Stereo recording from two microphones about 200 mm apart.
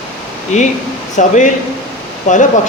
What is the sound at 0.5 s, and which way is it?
Speech, 35° left (ahead or behind).